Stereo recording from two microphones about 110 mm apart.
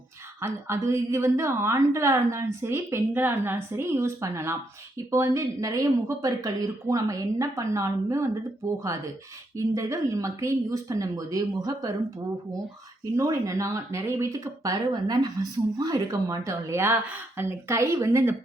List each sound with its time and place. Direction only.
0.3 s speech: 25° right (ahead or behind)
13.1 s speech: 30° right (ahead or behind)